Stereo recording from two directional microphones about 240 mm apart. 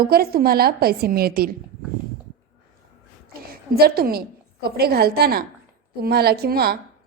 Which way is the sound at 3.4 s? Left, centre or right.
Right.